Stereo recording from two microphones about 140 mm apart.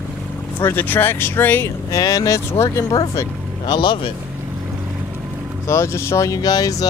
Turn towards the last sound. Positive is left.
turn(degrees=25)  # may be behind; listen again after turning